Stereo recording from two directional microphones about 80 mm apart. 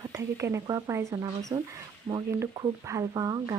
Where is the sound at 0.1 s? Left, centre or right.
Right.